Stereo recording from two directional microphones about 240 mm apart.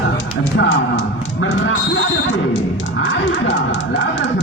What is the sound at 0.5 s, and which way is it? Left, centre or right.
Speech, left.